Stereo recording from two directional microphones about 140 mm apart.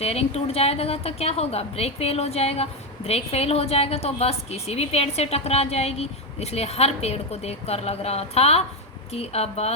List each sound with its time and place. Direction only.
0.0 s a woman's voice: 45° left (ahead or behind)